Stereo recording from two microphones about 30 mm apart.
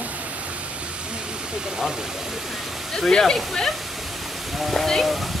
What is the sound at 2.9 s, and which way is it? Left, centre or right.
Speech, centre.